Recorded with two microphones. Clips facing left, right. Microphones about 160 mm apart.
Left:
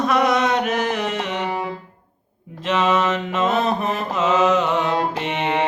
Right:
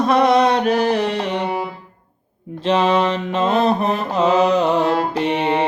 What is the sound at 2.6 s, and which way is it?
Mantra, 30° right (ahead or behind).